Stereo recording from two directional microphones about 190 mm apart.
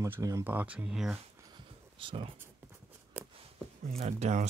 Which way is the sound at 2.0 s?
25° right (ahead or behind).